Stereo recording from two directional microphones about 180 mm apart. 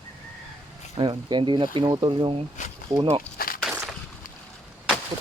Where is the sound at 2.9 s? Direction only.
40° right (ahead or behind).